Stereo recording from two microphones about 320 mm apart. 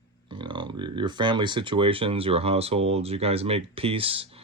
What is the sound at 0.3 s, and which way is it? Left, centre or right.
Speech, centre.